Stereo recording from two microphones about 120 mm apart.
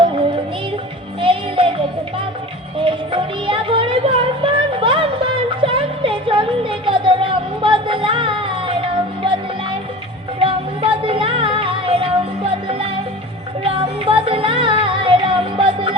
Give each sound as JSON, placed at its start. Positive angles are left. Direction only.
{"t": 1.2, "sound": "music", "side_deg": -45}
{"t": 2.8, "sound": "music", "side_deg": -45}
{"t": 10.4, "sound": "music", "side_deg": -50}